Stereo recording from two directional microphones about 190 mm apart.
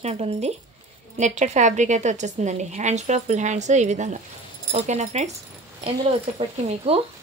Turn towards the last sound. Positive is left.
turn(degrees=-30)  # may be behind; listen again after turning